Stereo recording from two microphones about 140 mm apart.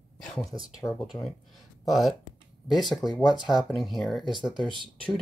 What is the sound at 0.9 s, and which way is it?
Speech, centre (ahead or behind).